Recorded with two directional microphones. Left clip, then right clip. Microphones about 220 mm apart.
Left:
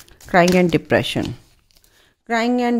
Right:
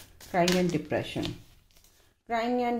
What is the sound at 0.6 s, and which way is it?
Speech, 50° left (ahead or behind).